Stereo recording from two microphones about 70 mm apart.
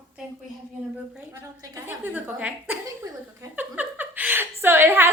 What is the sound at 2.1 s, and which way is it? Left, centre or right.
Speech, right.